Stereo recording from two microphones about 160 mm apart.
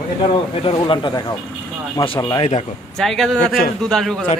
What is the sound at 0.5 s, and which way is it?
Speech, 35° left (ahead or behind).